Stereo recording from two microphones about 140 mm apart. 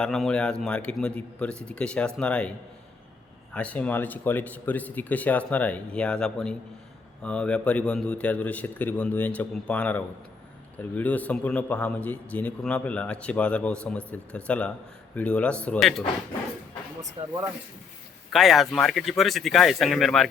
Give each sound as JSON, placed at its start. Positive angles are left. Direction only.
{"t": 0.0, "sound": "a man's voice", "side_deg": 5}
{"t": 3.5, "sound": "a man's voice", "side_deg": 10}
{"t": 17.0, "sound": "speech", "side_deg": -25}
{"t": 18.3, "sound": "speech", "side_deg": 0}